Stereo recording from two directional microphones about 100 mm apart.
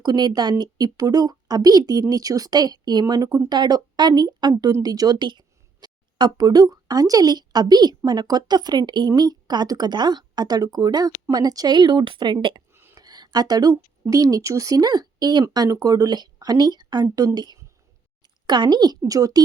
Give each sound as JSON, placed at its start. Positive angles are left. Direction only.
{"t": 0.0, "sound": "a woman's voice", "side_deg": -45}
{"t": 3.5, "sound": "a woman's voice", "side_deg": -45}
{"t": 12.9, "sound": "a sound", "side_deg": -40}
{"t": 14.1, "sound": "speech", "side_deg": -35}